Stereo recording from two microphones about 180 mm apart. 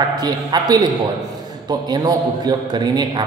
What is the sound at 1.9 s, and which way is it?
A man's voice, 25° right (ahead or behind).